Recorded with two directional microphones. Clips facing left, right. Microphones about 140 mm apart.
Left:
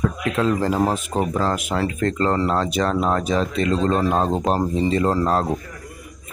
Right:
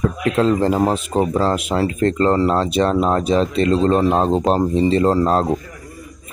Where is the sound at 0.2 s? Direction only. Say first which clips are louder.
Right 6 dB; 30° right (ahead or behind).